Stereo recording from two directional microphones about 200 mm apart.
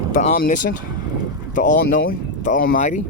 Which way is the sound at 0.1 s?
40° left (ahead or behind).